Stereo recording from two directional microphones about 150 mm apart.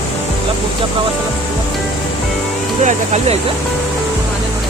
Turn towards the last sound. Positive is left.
turn(degrees=-50)  # may be behind; listen again after turning